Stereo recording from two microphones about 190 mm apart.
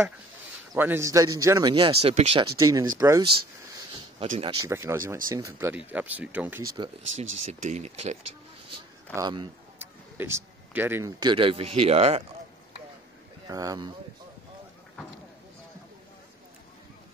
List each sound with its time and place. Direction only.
0.7 s a man's voice: 10° right (ahead or behind)
4.2 s speech: 30° right (ahead or behind)
4.6 s speech: 15° right (ahead or behind)
7.6 s speech: 35° right (ahead or behind)
9.1 s a man's voice: 20° right (ahead or behind)
13.5 s a man's voice: 20° right (ahead or behind)